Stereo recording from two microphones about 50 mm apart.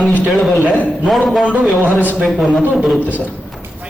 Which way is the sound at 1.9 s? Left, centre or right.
Left.